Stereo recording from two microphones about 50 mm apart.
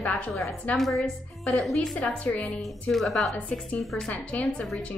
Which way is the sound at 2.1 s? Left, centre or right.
Left.